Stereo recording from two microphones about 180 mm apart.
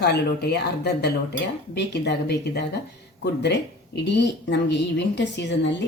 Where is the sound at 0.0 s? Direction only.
65° left (ahead or behind).